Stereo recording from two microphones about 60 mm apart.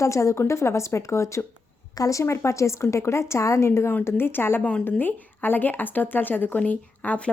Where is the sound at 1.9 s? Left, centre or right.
Left.